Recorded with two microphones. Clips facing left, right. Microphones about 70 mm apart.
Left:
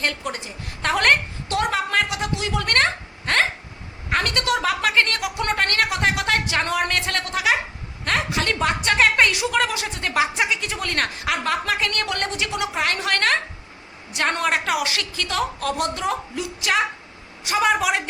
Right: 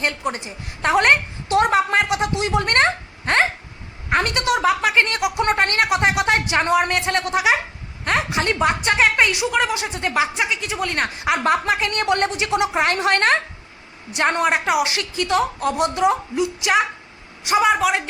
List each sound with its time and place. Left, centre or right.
0.0 s a woman's voice: right
9.0 s a woman's voice: centre
10.2 s a woman's voice: centre; by 13.4 s right
14.2 s a woman's voice: centre
17.6 s a woman's voice: centre